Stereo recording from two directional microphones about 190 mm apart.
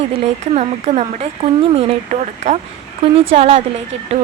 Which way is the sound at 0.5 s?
35° right (ahead or behind).